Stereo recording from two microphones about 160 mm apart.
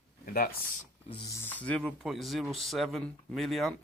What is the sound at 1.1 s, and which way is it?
Speech, 30° left (ahead or behind).